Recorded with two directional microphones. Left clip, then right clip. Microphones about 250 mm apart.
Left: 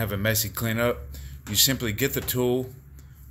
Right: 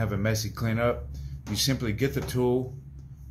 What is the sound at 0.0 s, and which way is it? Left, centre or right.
Speech, left.